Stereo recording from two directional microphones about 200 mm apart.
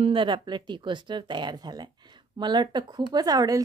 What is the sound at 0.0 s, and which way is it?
A woman's voice, 25° right (ahead or behind).